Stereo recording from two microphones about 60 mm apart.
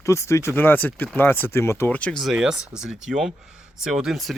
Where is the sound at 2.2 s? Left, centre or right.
Centre.